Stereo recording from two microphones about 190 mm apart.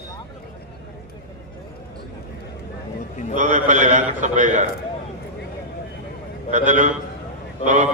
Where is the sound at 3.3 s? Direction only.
40° right (ahead or behind).